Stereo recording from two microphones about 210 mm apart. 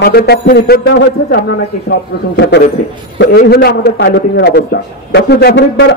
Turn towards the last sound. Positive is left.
turn(degrees=55)  # may be behind; listen again after turning